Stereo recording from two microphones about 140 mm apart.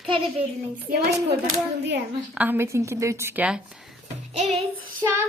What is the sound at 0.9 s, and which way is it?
Speech, 90° right.